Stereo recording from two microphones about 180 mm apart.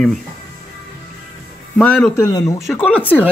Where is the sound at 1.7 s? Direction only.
5° left (ahead or behind).